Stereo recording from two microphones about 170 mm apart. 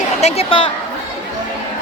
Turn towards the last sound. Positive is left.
turn(degrees=40)  # may be behind; listen again after turning